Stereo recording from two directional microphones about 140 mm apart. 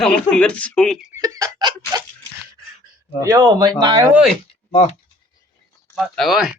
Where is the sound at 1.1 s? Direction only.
25° right (ahead or behind).